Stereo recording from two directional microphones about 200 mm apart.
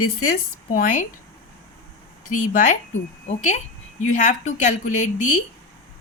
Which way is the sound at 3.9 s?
40° left (ahead or behind).